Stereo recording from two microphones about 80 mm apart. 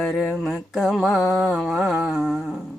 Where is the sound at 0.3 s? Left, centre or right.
Centre.